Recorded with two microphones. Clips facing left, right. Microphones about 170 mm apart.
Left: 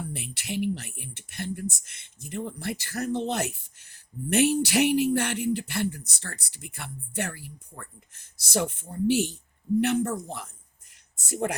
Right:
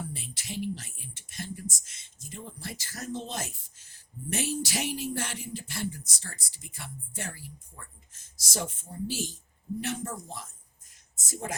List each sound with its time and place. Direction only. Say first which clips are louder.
0.1 s speech: left 6 dB; 65° left (ahead or behind)